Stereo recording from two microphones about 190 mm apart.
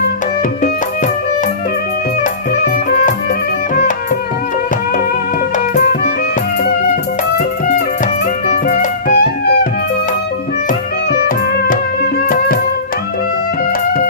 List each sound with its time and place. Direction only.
5.7 s music: 50° left (ahead or behind)
8.6 s music: 45° left (ahead or behind)